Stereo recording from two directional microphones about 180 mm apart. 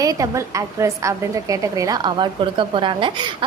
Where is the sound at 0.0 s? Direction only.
20° right (ahead or behind).